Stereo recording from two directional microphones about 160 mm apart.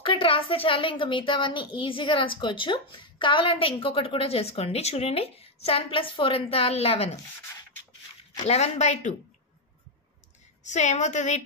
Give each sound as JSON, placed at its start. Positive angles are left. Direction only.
{"t": 0.0, "sound": "a woman's voice", "side_deg": 35}
{"t": 8.5, "sound": "a woman's voice", "side_deg": 40}
{"t": 10.6, "sound": "a woman's voice", "side_deg": 45}